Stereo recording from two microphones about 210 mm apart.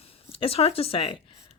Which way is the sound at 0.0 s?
25° left (ahead or behind).